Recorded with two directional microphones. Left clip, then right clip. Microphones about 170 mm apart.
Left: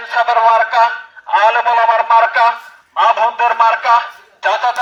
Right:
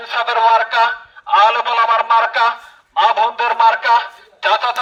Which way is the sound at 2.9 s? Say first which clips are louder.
Left 2 dB; 35° right (ahead or behind).